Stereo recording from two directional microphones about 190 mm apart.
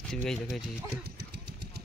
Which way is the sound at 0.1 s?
Centre (ahead or behind).